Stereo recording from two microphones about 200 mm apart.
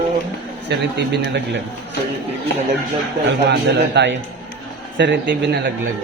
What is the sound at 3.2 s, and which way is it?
A man's voice, 65° right (ahead or behind).